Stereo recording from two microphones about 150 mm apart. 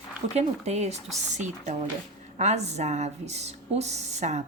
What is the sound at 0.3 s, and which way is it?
A woman's voice, 45° right (ahead or behind).